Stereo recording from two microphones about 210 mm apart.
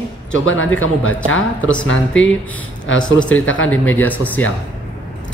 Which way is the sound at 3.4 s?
70° left (ahead or behind).